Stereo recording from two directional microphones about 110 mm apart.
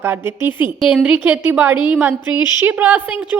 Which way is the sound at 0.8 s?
5° right (ahead or behind).